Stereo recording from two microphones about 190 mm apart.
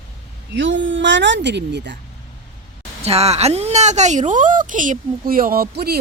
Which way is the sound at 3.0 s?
35° right (ahead or behind).